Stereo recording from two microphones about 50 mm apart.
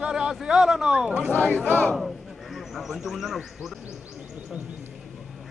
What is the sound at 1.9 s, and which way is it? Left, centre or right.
A man's voice, centre.